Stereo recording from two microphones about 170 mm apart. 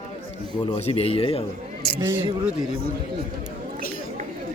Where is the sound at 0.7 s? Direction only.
35° left (ahead or behind).